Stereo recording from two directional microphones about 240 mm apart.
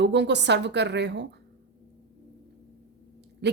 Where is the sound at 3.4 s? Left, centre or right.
Right.